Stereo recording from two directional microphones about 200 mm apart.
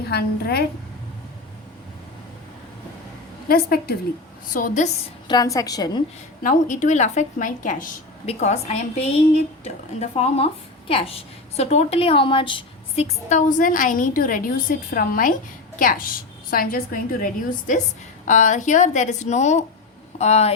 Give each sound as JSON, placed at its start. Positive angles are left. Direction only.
{"t": 0.1, "sound": "a woman's voice", "side_deg": 50}
{"t": 3.5, "sound": "a woman's voice", "side_deg": 50}
{"t": 4.5, "sound": "a woman's voice", "side_deg": 40}
{"t": 5.3, "sound": "a woman's voice", "side_deg": 20}
{"t": 6.4, "sound": "a woman's voice", "side_deg": 40}
{"t": 13.2, "sound": "a woman's voice", "side_deg": 40}
{"t": 18.3, "sound": "a woman's voice", "side_deg": 40}